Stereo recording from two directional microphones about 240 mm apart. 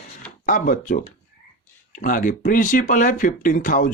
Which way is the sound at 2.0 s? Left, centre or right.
Left.